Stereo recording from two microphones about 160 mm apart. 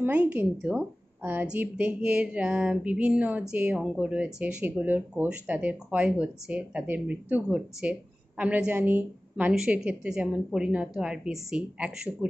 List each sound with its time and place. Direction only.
0.0 s a woman's voice: 10° right (ahead or behind)